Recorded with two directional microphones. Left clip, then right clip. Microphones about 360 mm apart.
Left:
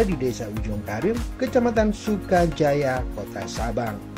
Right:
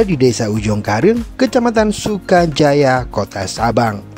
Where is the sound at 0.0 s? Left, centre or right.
Right.